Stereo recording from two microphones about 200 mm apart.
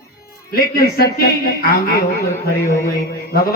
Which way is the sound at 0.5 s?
50° left (ahead or behind).